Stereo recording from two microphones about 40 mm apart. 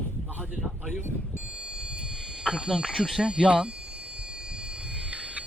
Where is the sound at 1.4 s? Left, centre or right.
Right.